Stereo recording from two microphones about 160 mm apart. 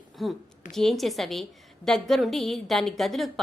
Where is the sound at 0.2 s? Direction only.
Centre (ahead or behind).